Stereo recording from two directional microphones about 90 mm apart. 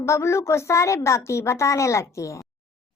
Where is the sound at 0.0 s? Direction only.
30° left (ahead or behind).